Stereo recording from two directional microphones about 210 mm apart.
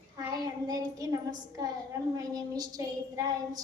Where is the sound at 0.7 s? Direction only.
15° right (ahead or behind).